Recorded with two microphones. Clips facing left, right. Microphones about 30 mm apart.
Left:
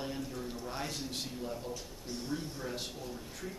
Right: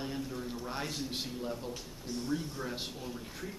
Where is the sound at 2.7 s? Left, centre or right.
Centre.